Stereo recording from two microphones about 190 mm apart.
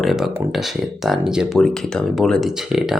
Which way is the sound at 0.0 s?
Centre (ahead or behind).